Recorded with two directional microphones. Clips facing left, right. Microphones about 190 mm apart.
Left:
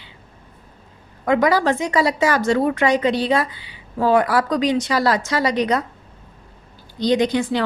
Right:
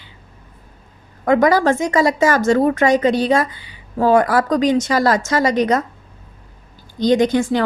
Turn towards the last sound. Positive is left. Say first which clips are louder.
# right 3 dB
turn(degrees=-45)  # may be behind; listen again after turning